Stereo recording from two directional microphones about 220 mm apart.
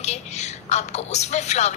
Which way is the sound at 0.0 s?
30° left (ahead or behind).